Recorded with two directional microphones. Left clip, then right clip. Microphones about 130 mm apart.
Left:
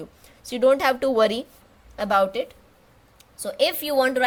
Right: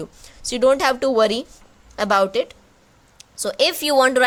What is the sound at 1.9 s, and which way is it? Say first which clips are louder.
A woman's voice: right 3 dB; 40° right (ahead or behind).